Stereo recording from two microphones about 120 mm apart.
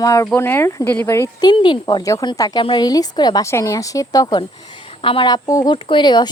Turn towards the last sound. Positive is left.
turn(degrees=40)  # may be behind; listen again after turning